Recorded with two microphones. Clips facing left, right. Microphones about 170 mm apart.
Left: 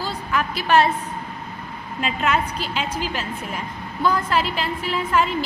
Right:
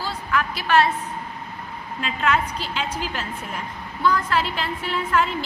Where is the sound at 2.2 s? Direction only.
10° left (ahead or behind).